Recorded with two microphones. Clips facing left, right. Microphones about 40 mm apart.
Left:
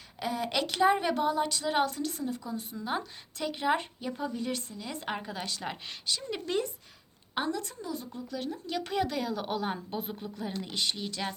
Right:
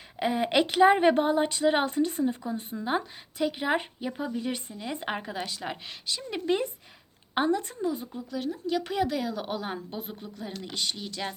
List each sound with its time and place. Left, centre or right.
0.2 s a woman's voice: right
8.1 s a woman's voice: centre